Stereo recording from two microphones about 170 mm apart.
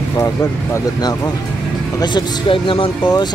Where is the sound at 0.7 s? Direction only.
25° left (ahead or behind).